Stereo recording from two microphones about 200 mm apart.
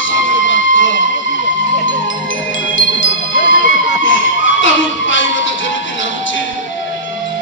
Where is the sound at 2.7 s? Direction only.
70° left (ahead or behind).